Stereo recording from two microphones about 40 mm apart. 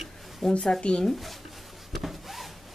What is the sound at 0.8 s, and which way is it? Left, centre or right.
Speech, centre.